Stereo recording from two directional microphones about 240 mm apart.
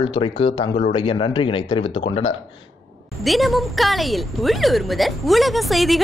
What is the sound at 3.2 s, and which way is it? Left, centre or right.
A woman's voice, centre.